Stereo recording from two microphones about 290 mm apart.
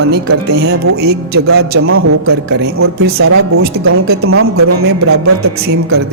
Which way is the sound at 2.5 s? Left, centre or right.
Right.